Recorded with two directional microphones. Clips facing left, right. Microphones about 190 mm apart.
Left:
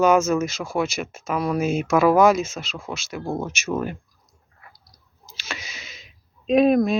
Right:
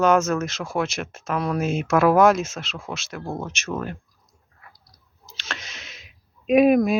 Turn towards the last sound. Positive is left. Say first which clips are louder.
# right 1 dB
turn(degrees=-5)  # may be behind; listen again after turning